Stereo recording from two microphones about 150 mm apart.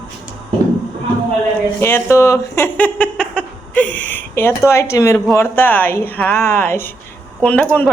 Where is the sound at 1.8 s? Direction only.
15° left (ahead or behind).